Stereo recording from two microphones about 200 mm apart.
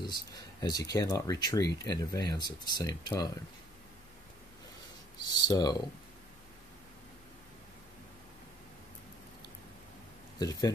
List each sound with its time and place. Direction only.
0.0 s speech: 20° left (ahead or behind)
5.3 s speech: 20° left (ahead or behind)
10.4 s speech: 20° left (ahead or behind)